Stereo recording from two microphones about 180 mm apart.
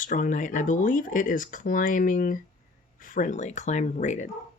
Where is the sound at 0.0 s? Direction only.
45° left (ahead or behind).